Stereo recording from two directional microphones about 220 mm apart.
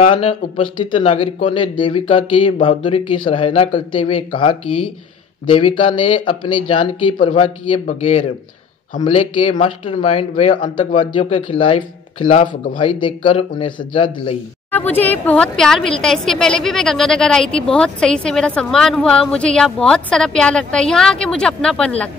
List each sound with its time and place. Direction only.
0.0 s speech: 25° left (ahead or behind)
9.3 s speech: 25° left (ahead or behind)
14.7 s a woman's voice: 10° left (ahead or behind)